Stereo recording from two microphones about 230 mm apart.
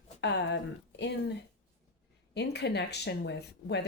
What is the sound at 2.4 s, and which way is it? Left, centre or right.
Speech, left.